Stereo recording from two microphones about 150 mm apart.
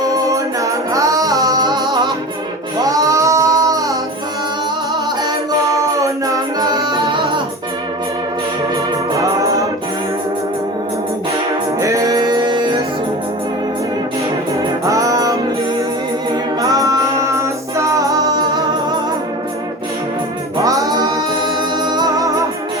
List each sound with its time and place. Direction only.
0.1 s singing: 20° right (ahead or behind)
2.8 s music: 20° right (ahead or behind)
5.7 s music: 20° right (ahead or behind)
9.1 s music: 25° right (ahead or behind)
11.8 s music: 20° right (ahead or behind)
14.8 s music: 20° right (ahead or behind)
16.6 s music: 25° right (ahead or behind)
20.7 s singing: 25° right (ahead or behind)
21.4 s music: 30° right (ahead or behind)